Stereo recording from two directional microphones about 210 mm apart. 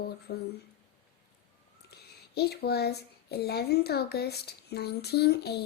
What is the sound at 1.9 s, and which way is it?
Speech, 50° left (ahead or behind).